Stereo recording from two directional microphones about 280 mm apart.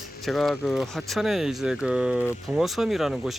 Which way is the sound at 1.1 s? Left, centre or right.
Centre.